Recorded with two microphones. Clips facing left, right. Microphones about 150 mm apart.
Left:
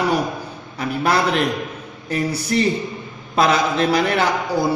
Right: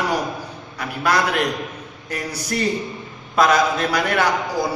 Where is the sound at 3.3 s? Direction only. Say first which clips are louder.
Even; 30° left (ahead or behind).